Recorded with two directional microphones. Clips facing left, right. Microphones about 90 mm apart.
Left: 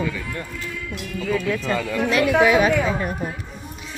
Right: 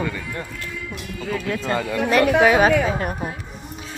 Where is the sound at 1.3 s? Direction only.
35° right (ahead or behind).